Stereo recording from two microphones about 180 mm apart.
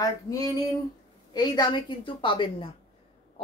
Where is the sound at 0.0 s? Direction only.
20° left (ahead or behind).